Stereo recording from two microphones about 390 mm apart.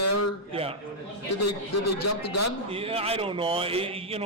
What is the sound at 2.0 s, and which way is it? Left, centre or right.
Speech, left.